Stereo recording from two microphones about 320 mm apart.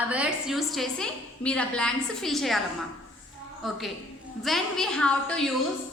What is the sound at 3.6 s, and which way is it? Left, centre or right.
A woman's voice, centre.